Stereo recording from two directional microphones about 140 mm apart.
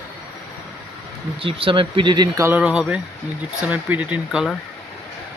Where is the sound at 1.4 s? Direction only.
40° right (ahead or behind).